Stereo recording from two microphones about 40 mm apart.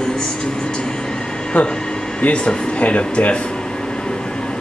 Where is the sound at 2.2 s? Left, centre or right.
Left.